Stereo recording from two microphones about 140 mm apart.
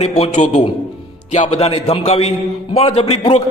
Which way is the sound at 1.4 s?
45° left (ahead or behind).